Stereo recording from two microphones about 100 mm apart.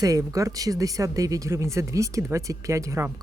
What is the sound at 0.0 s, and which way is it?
Speech, 35° right (ahead or behind).